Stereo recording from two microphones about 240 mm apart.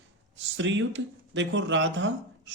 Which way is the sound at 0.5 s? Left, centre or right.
Right.